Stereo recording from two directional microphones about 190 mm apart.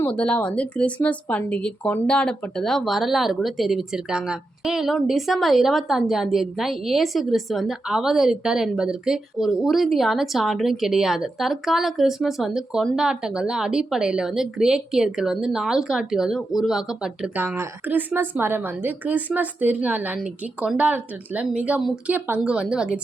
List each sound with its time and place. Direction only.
0.0 s speech: 5° left (ahead or behind)